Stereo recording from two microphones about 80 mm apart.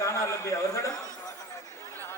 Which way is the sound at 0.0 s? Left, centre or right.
Left.